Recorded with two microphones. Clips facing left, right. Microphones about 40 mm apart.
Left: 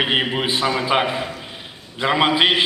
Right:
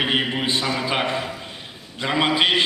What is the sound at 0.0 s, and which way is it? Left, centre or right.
A man's voice, centre.